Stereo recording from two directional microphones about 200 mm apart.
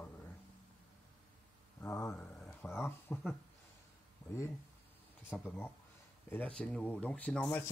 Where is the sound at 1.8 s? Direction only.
15° left (ahead or behind).